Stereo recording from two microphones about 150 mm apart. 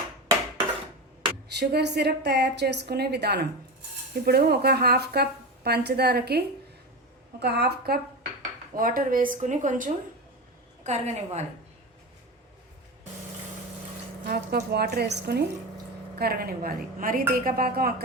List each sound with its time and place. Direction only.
1.5 s speech: 90° right
8.7 s speech: 70° right (ahead or behind)
10.8 s a woman's voice: 50° right (ahead or behind)
14.3 s a woman's voice: 90° right